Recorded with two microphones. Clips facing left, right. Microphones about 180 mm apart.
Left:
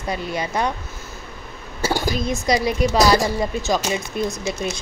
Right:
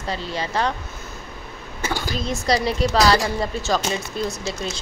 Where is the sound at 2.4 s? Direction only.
15° left (ahead or behind).